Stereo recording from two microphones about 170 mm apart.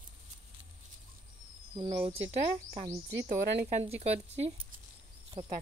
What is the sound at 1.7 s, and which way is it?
Speech, 30° right (ahead or behind).